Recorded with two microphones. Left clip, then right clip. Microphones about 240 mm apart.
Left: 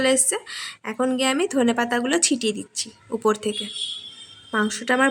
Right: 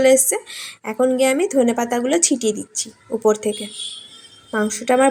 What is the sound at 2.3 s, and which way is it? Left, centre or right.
Speech, left.